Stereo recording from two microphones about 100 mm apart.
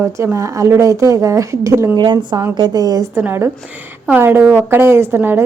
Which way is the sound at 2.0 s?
45° right (ahead or behind).